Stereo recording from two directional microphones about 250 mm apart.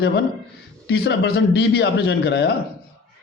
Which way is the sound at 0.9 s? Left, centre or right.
Left.